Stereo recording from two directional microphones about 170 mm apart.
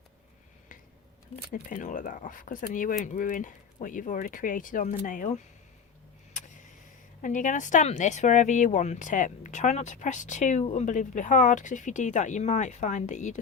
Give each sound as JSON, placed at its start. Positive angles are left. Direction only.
{"t": 1.7, "sound": "speech", "side_deg": 50}
{"t": 7.2, "sound": "speech", "side_deg": 50}